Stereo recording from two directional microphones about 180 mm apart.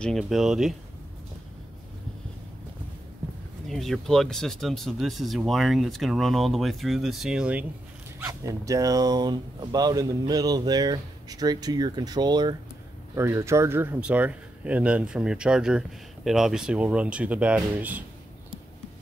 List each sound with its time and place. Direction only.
0.0 s speech: centre (ahead or behind)
3.6 s speech: centre (ahead or behind)
8.2 s speech: 20° right (ahead or behind)